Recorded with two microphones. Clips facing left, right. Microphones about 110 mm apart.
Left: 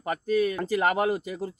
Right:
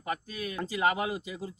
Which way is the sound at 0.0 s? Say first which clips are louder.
Left 11 dB; 40° left (ahead or behind).